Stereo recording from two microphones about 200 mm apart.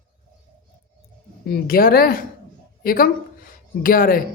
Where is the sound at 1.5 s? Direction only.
50° left (ahead or behind).